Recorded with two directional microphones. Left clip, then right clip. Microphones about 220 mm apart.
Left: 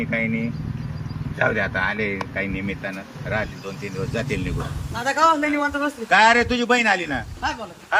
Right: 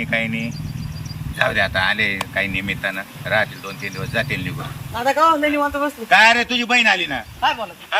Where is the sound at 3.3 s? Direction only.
5° left (ahead or behind).